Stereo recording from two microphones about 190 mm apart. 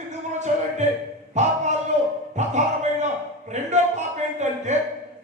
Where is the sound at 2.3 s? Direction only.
40° right (ahead or behind).